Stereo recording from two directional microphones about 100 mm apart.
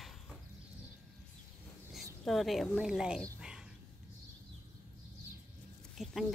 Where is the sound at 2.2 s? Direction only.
Centre (ahead or behind).